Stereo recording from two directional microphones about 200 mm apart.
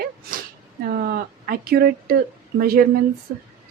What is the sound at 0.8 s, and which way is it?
A woman's voice, 45° right (ahead or behind).